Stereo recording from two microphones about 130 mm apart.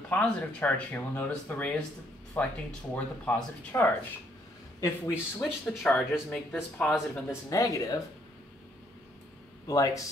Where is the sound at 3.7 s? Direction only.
20° left (ahead or behind).